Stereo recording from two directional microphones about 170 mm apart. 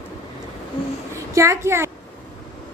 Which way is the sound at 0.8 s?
30° left (ahead or behind).